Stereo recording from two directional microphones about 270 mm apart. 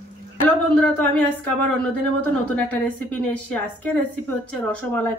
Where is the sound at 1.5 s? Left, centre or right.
Centre.